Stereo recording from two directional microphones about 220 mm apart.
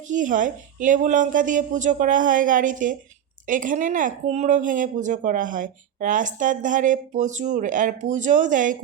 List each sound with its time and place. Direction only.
0.1 s speech: 35° right (ahead or behind)